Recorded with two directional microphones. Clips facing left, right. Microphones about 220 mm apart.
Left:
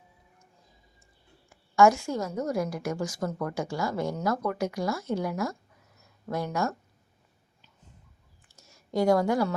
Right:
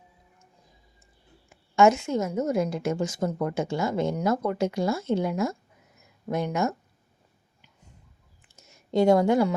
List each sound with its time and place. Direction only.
1.5 s a woman's voice: 20° right (ahead or behind)
8.5 s speech: 20° right (ahead or behind)